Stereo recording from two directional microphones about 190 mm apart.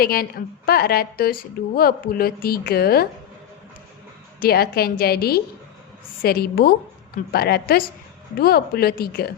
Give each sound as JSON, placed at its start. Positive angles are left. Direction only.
{"t": 0.0, "sound": "a woman's voice", "side_deg": 50}
{"t": 4.4, "sound": "a woman's voice", "side_deg": 55}